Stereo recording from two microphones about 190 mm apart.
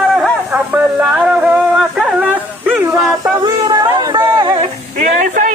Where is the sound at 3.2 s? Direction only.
20° right (ahead or behind).